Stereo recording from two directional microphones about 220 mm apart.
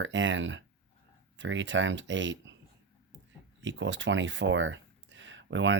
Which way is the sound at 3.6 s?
55° right (ahead or behind).